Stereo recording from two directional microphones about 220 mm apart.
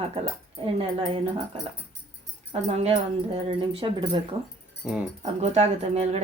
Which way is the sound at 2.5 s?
25° right (ahead or behind).